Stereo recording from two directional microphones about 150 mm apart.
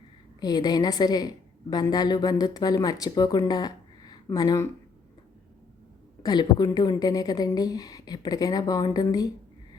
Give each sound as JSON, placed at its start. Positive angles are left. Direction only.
{"t": 0.3, "sound": "a woman's voice", "side_deg": 25}
{"t": 6.2, "sound": "a woman's voice", "side_deg": 30}